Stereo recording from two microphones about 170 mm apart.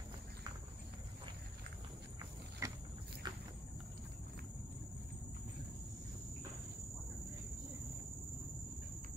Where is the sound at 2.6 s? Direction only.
20° right (ahead or behind).